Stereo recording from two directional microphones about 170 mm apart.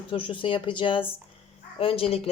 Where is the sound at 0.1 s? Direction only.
30° left (ahead or behind).